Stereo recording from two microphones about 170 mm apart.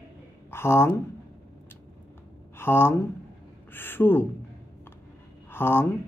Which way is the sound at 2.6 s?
15° left (ahead or behind).